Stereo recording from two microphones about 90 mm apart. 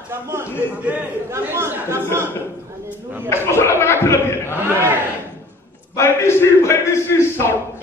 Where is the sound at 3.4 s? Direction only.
30° left (ahead or behind).